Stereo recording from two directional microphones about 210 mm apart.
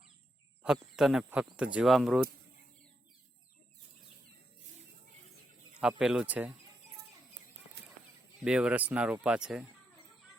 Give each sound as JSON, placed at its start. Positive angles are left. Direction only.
{"t": 0.6, "sound": "speech", "side_deg": 0}
{"t": 6.0, "sound": "speech", "side_deg": -5}
{"t": 8.4, "sound": "speech", "side_deg": -5}